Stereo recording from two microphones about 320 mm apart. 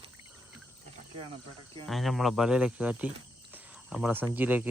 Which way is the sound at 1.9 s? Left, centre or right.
Centre.